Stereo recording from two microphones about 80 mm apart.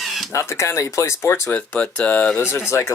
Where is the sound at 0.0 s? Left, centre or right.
Centre.